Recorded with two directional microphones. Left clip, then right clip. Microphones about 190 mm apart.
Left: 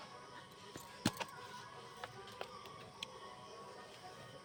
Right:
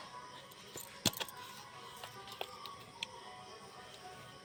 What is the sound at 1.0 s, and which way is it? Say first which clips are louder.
Keys jangling: right 4 dB; 15° right (ahead or behind).